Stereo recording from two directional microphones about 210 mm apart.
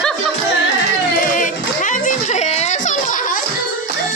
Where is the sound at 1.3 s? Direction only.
40° left (ahead or behind).